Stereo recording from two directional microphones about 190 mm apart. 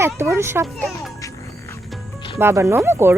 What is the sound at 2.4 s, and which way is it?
Speech, 15° right (ahead or behind).